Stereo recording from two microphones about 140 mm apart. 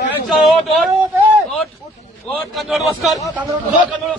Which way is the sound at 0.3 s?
Centre (ahead or behind).